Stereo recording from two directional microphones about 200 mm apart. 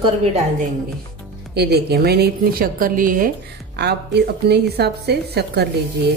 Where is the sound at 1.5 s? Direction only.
55° right (ahead or behind).